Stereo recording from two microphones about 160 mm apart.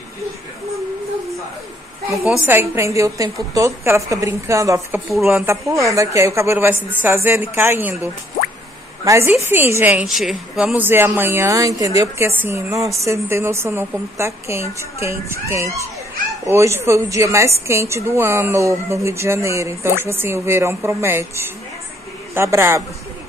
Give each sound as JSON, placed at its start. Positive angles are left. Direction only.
{"t": 2.1, "sound": "speech", "side_deg": -5}
{"t": 9.0, "sound": "a woman's voice", "side_deg": -20}